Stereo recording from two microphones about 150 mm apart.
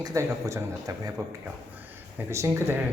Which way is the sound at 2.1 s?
15° right (ahead or behind).